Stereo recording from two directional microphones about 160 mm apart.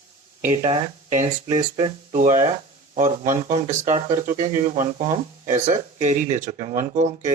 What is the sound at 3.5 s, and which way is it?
Speech, 50° right (ahead or behind).